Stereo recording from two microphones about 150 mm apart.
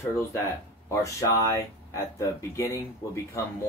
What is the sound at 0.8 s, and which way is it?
Speech, 20° left (ahead or behind).